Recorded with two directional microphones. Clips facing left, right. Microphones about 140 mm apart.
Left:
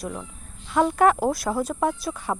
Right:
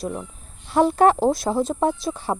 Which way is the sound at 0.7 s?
30° right (ahead or behind).